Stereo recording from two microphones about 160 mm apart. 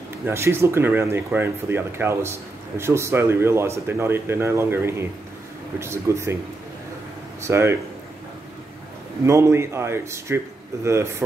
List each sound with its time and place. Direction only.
0.2 s speech: 15° right (ahead or behind)
7.4 s speech: 15° right (ahead or behind)
9.2 s speech: 15° right (ahead or behind)